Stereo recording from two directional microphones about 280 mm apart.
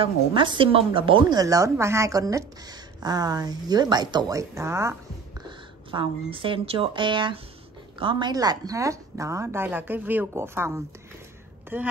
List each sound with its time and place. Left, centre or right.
0.0 s speech: centre